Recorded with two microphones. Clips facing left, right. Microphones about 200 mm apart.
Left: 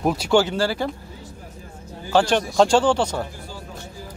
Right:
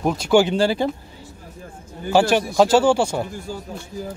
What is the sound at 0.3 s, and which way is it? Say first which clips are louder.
Speech: right 4 dB; 15° right (ahead or behind).